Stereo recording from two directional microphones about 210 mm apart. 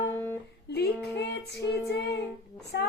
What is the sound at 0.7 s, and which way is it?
Female singing, 50° left (ahead or behind).